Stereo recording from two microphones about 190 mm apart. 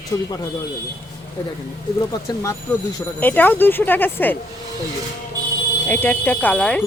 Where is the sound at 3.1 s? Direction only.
10° left (ahead or behind).